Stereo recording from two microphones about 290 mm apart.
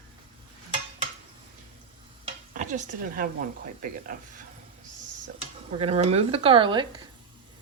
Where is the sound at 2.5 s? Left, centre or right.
Right.